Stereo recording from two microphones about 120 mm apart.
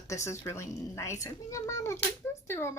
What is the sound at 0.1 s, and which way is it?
A woman's voice, 25° left (ahead or behind).